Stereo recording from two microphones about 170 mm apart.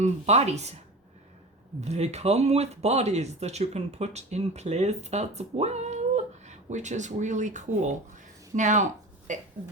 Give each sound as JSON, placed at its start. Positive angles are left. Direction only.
{"t": 0.0, "sound": "speech", "side_deg": -40}
{"t": 1.8, "sound": "speech", "side_deg": -40}